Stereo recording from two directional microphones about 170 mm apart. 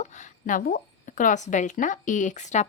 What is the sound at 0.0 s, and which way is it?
Speech, 45° left (ahead or behind).